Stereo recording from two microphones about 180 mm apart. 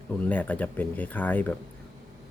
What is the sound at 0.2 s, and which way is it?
Speech, 10° left (ahead or behind).